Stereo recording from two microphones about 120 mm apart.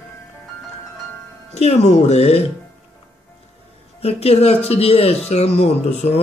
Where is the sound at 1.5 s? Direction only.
65° left (ahead or behind).